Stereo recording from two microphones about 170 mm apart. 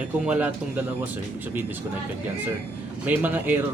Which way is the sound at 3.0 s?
10° right (ahead or behind).